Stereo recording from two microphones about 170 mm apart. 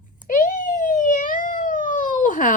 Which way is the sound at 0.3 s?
50° left (ahead or behind).